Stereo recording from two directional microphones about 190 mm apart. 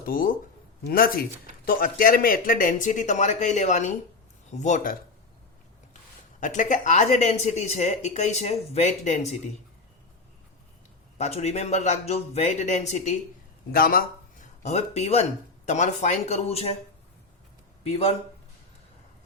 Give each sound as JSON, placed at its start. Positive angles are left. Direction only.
{"t": 0.0, "sound": "speech", "side_deg": 45}
{"t": 6.4, "sound": "speech", "side_deg": 40}
{"t": 11.2, "sound": "speech", "side_deg": 35}
{"t": 13.7, "sound": "speech", "side_deg": 50}
{"t": 17.8, "sound": "speech", "side_deg": 30}